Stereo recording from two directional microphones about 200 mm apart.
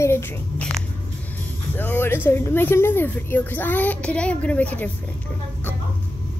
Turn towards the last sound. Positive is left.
turn(degrees=5)  # may be behind; listen again after turning